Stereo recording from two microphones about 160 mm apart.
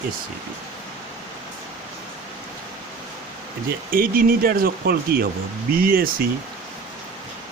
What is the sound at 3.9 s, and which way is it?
Speech, 65° right (ahead or behind).